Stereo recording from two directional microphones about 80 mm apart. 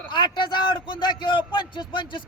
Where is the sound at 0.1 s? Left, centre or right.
Left.